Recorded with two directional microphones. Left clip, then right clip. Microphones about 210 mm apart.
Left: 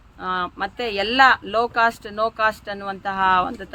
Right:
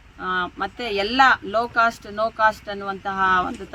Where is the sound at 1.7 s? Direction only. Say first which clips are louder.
Even; 25° left (ahead or behind).